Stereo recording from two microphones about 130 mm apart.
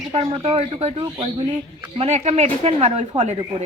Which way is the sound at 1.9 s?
60° right (ahead or behind).